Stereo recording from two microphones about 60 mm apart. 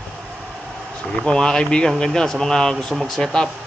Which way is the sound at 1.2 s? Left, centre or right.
Centre.